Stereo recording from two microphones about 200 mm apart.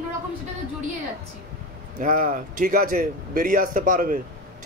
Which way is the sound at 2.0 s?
45° right (ahead or behind).